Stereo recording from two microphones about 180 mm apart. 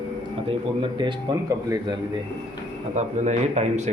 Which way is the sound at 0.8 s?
25° right (ahead or behind).